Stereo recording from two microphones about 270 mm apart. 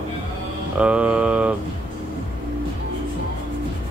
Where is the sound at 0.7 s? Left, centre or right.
Centre.